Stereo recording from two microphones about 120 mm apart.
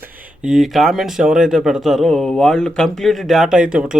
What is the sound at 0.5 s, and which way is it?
Speech, centre (ahead or behind).